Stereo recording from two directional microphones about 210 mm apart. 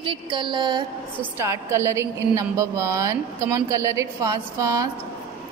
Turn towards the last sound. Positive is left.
turn(degrees=-15)  # may be behind; listen again after turning